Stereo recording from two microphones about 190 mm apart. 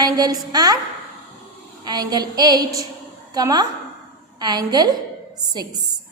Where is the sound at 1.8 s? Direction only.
20° right (ahead or behind).